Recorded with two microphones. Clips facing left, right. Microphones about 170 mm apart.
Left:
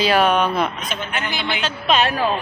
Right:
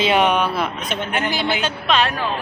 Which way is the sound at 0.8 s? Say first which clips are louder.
Right 4 dB; 50° right (ahead or behind).